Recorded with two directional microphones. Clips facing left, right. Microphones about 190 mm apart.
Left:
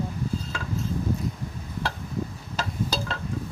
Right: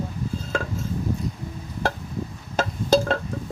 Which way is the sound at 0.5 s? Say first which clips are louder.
Right 8 dB; 50° right (ahead or behind).